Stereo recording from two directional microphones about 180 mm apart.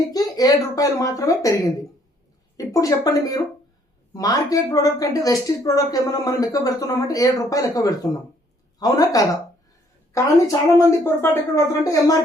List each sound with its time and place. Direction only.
0.1 s a woman's voice: 20° left (ahead or behind)